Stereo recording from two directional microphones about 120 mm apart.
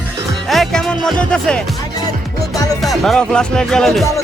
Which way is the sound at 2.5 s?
30° left (ahead or behind).